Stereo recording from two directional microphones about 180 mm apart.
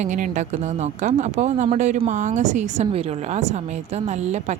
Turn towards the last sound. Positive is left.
turn(degrees=-40)  # may be behind; listen again after turning